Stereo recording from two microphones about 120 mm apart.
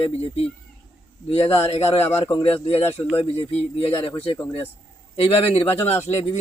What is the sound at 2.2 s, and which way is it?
Speech, 40° left (ahead or behind).